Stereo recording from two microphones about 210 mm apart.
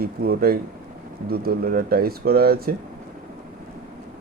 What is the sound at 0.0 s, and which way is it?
Speech, 45° right (ahead or behind).